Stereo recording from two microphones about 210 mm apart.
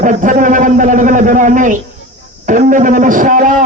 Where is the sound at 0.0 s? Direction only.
40° right (ahead or behind).